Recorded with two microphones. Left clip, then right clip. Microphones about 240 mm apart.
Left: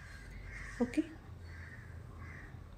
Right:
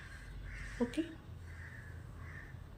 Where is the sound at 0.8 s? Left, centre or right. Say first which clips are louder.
Left 1 dB; centre.